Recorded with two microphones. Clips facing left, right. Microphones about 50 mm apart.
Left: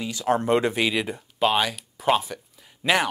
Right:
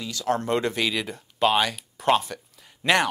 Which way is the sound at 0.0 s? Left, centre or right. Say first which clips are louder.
Left 3 dB; left.